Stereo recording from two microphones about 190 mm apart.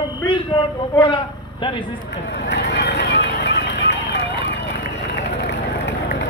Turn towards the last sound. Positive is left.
turn(degrees=70)  # may be behind; listen again after turning